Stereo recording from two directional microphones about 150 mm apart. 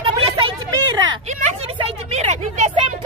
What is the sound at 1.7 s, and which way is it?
A woman's voice, 40° right (ahead or behind).